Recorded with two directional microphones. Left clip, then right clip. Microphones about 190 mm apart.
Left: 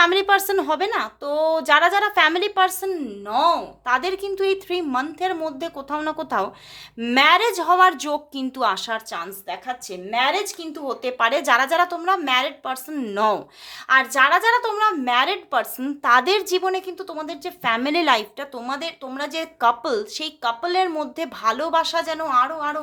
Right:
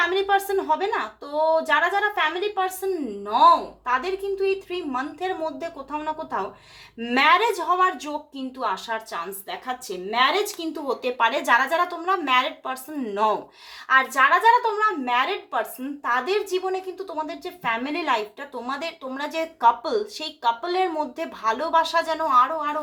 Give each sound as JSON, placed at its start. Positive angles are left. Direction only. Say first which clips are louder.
{"t": 0.0, "sound": "speech", "louder": "left 5 dB", "side_deg": 40}
{"t": 2.8, "sound": "a woman's voice", "louder": "even", "side_deg": 30}
{"t": 7.0, "sound": "speech", "louder": "left 2 dB", "side_deg": 40}
{"t": 9.5, "sound": "speech", "louder": "left 3 dB", "side_deg": 20}